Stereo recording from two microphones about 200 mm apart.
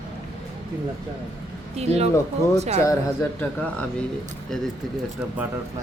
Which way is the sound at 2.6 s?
35° right (ahead or behind).